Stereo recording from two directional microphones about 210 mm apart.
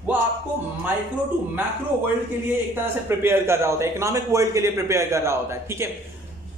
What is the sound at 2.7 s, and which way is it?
A man's voice, 10° right (ahead or behind).